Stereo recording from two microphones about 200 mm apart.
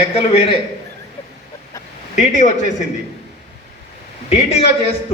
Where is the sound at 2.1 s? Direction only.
40° left (ahead or behind).